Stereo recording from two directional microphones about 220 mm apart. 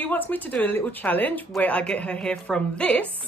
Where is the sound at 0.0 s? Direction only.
10° left (ahead or behind).